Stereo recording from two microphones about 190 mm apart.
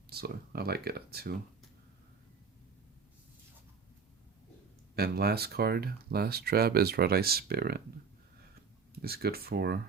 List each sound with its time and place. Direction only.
0.1 s speech: 55° right (ahead or behind)
4.9 s speech: 55° right (ahead or behind)
9.0 s speech: 55° right (ahead or behind)